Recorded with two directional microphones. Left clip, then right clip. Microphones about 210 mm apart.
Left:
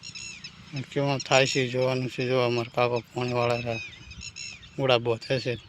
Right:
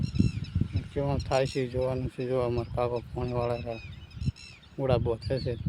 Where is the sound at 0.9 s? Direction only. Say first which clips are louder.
Left 5 dB; centre (ahead or behind).